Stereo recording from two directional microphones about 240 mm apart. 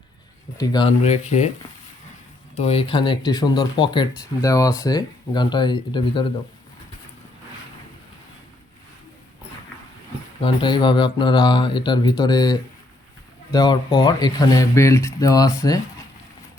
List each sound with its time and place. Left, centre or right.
0.6 s speech: centre
2.6 s speech: left
10.4 s speech: centre